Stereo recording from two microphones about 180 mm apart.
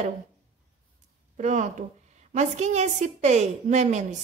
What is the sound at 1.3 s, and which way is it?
A woman's voice, 40° right (ahead or behind).